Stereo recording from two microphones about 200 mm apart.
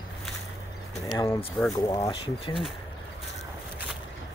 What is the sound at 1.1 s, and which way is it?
Speech, 15° left (ahead or behind).